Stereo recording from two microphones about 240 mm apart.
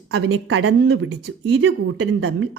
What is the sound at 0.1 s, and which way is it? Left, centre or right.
Speech, right.